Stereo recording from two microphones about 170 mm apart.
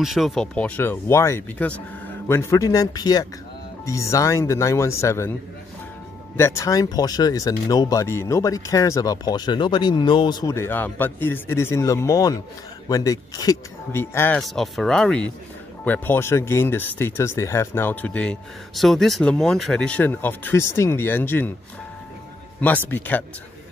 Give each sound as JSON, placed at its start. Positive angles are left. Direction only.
{"t": 0.0, "sound": "speech", "side_deg": 0}
{"t": 6.3, "sound": "speech", "side_deg": 15}
{"t": 14.4, "sound": "speech", "side_deg": 0}
{"t": 22.8, "sound": "speech", "side_deg": 10}